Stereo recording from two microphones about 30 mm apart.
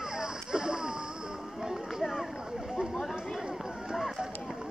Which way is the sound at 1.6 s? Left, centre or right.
Centre.